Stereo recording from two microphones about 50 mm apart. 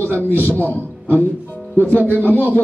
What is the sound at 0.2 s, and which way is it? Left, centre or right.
Speech, left.